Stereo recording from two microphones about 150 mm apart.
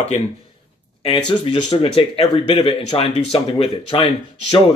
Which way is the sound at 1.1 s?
30° left (ahead or behind).